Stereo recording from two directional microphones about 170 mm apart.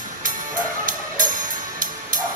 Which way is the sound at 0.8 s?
50° right (ahead or behind).